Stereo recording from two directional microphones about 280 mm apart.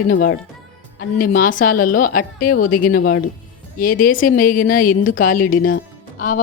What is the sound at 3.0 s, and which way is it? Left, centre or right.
Speech, left.